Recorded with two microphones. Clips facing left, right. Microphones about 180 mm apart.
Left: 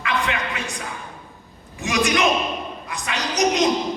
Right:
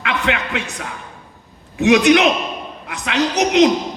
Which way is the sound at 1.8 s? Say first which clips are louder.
Right 8 dB; 70° right (ahead or behind).